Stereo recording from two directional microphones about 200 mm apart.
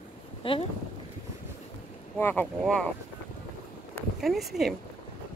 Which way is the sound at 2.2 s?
10° left (ahead or behind).